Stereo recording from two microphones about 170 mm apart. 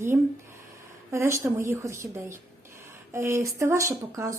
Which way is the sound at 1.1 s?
15° right (ahead or behind).